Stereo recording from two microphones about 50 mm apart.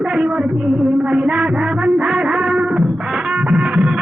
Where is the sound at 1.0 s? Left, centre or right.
Centre.